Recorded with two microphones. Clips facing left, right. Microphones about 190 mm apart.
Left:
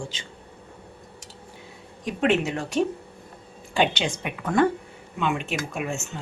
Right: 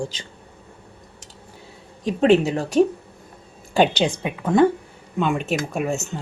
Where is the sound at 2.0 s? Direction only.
35° right (ahead or behind).